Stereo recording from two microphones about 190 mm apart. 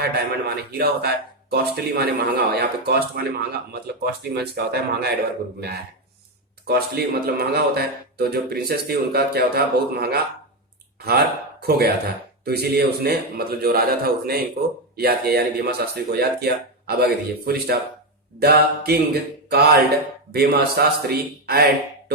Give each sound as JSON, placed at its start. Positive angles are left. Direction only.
{"t": 0.0, "sound": "a man's voice", "side_deg": -55}
{"t": 6.7, "sound": "a man's voice", "side_deg": -55}